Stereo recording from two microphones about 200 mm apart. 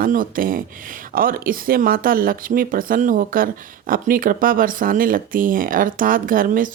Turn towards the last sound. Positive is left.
turn(degrees=-45)  # may be behind; listen again after turning